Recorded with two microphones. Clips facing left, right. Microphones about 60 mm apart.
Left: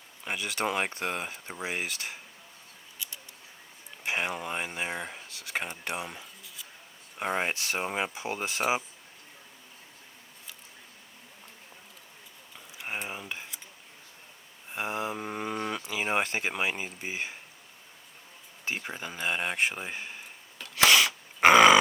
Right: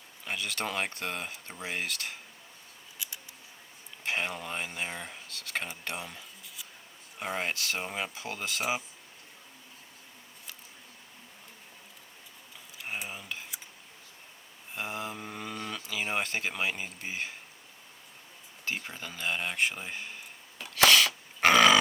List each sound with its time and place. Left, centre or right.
0.3 s speech: centre
4.0 s speech: centre
7.3 s speech: left
13.1 s cutlery: centre
14.7 s speech: left
18.6 s speech: centre
20.7 s dog: centre